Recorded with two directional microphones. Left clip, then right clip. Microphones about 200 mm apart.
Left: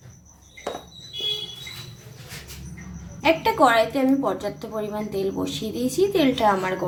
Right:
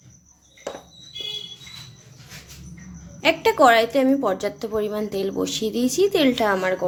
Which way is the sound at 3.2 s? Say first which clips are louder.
Right 2 dB; 55° right (ahead or behind).